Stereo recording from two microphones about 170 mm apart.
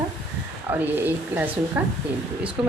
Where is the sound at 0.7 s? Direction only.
10° right (ahead or behind).